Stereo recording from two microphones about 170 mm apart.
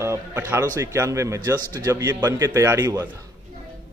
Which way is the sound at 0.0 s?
15° right (ahead or behind).